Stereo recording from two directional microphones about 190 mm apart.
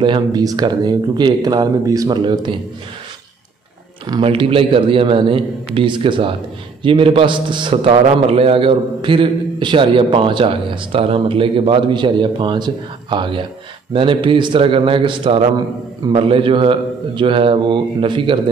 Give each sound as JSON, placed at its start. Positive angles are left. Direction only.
{"t": 0.0, "sound": "a man's voice", "side_deg": -25}
{"t": 4.1, "sound": "a man's voice", "side_deg": -25}